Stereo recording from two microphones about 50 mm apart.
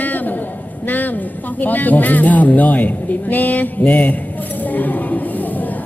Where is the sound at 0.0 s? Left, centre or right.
Left.